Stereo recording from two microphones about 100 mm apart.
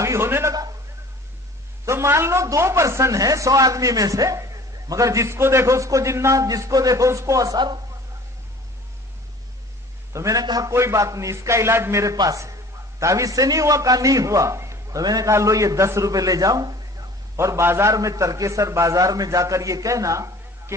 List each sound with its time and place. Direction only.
0.0 s a sound: 25° right (ahead or behind)
1.9 s speech: 25° right (ahead or behind)
10.1 s speech: 30° right (ahead or behind)
10.7 s a man's voice: 30° right (ahead or behind)
17.4 s speech: 25° right (ahead or behind)